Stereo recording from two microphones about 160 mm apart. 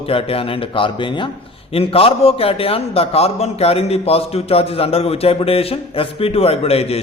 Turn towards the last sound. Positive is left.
turn(degrees=40)  # may be behind; listen again after turning